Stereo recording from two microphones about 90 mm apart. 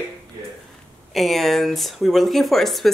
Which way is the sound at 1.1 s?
Centre (ahead or behind).